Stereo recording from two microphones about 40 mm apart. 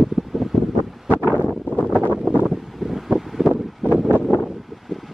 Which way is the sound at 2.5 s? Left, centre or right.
Centre.